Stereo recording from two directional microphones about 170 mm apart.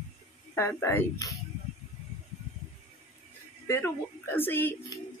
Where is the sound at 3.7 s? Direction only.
10° left (ahead or behind).